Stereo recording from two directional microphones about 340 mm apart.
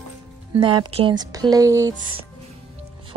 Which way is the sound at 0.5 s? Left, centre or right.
Centre.